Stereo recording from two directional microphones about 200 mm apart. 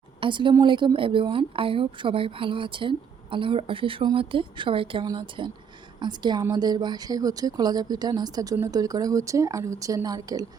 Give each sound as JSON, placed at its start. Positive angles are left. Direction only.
{"t": 0.2, "sound": "a woman's voice", "side_deg": -25}